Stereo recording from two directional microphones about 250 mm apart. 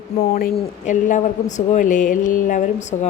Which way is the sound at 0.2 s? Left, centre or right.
Left.